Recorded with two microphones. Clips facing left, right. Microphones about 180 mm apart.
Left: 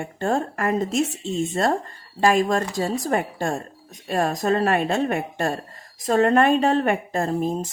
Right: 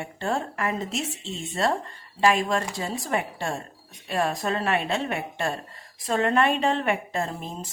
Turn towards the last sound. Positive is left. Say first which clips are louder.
# left 9 dB
turn(degrees=45)  # may be behind; listen again after turning